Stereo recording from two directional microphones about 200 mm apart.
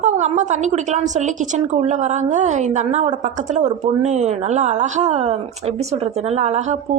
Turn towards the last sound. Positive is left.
turn(degrees=-35)  # may be behind; listen again after turning